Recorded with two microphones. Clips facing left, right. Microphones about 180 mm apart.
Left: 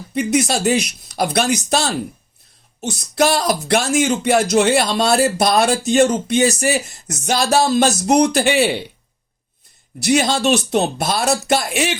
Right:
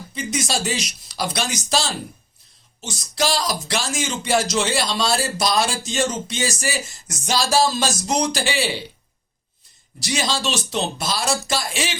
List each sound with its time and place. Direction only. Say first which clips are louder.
0.1 s speech: left 8 dB; 60° left (ahead or behind)
10.0 s speech: left 8 dB; 60° left (ahead or behind)